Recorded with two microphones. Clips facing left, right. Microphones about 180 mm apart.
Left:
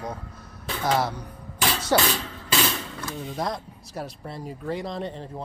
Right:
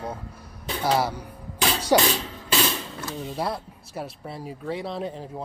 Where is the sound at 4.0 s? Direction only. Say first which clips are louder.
Even; 5° right (ahead or behind).